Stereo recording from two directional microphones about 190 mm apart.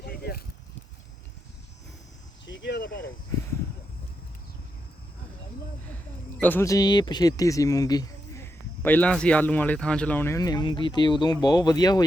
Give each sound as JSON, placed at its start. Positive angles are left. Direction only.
{"t": 0.0, "sound": "a sound", "side_deg": 55}
{"t": 2.5, "sound": "cricket", "side_deg": 70}
{"t": 6.4, "sound": "speech", "side_deg": 10}